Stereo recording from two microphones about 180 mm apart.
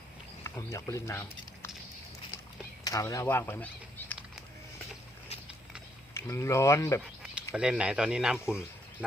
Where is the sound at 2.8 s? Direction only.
20° left (ahead or behind).